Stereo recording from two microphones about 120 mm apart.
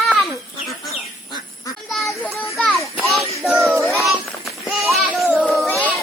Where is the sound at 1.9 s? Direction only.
Centre (ahead or behind).